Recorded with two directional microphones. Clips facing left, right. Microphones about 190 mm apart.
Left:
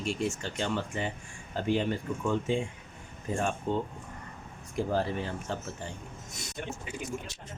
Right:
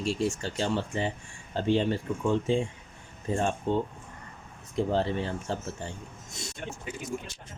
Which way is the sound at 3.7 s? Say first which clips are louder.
Right 3 dB; 30° right (ahead or behind).